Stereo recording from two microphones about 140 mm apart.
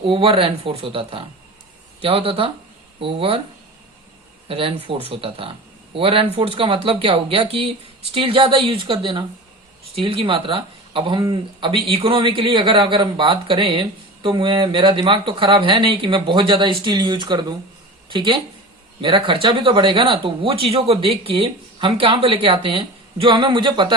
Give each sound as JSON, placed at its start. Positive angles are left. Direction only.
{"t": 0.0, "sound": "speech", "side_deg": -40}
{"t": 4.4, "sound": "speech", "side_deg": -40}